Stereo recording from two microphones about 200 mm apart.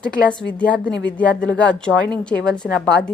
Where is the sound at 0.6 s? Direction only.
5° left (ahead or behind).